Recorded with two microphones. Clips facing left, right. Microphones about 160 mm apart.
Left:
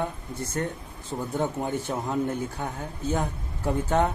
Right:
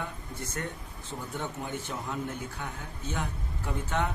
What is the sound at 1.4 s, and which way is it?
A man's voice, 45° left (ahead or behind).